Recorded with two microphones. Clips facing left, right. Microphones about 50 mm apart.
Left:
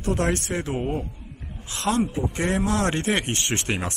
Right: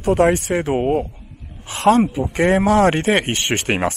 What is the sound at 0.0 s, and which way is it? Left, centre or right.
Speech, right.